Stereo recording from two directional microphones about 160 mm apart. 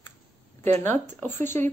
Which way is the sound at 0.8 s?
15° left (ahead or behind).